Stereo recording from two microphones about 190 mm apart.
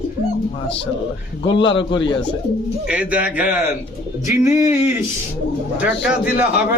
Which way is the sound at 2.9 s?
5° right (ahead or behind).